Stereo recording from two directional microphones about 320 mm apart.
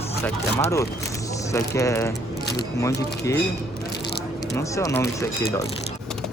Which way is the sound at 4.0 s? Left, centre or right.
Centre.